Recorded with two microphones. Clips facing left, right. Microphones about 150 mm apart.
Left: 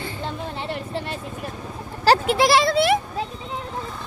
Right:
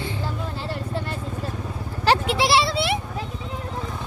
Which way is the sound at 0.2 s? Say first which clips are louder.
Left 1 dB; 25° left (ahead or behind).